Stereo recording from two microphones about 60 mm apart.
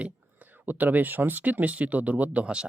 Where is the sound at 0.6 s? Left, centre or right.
Right.